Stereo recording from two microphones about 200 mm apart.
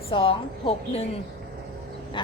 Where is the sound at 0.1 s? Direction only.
25° left (ahead or behind).